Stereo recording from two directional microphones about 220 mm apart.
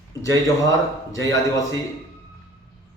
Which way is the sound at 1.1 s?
15° left (ahead or behind).